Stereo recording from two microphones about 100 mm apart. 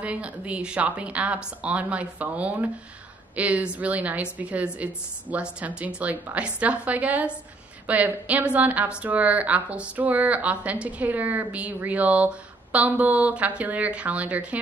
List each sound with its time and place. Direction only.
0.0 s a woman's voice: 10° right (ahead or behind)